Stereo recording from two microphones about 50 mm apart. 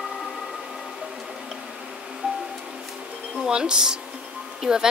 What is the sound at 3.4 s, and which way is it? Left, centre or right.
Speech, centre.